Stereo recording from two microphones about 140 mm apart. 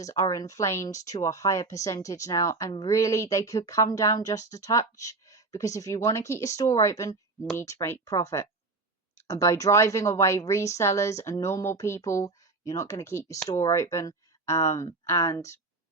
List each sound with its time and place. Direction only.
0.0 s speech: 25° left (ahead or behind)